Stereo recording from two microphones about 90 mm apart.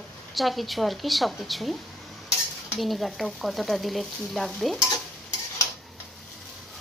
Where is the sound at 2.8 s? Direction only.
Centre (ahead or behind).